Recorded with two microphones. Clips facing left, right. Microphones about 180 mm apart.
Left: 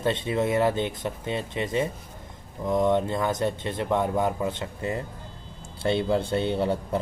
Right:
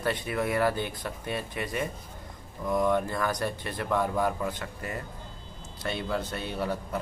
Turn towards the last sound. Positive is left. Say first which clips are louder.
# left 7 dB
turn(degrees=25)  # may be behind; listen again after turning